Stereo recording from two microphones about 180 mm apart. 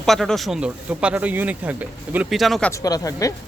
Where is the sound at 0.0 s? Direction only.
Centre (ahead or behind).